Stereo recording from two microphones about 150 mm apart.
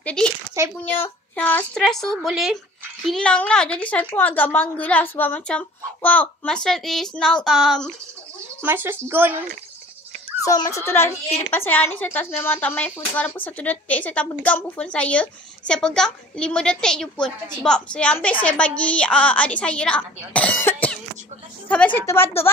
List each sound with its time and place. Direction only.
0.0 s speech: 5° left (ahead or behind)
0.6 s speech: 20° right (ahead or behind)
1.3 s a woman's voice: 10° left (ahead or behind)
8.6 s speech: 15° right (ahead or behind)
10.4 s a woman's voice: 20° left (ahead or behind)